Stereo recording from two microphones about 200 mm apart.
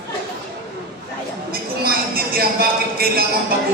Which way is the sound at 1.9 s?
50° right (ahead or behind).